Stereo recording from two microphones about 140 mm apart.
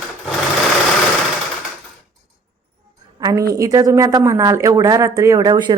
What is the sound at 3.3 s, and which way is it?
A woman's voice, 25° right (ahead or behind).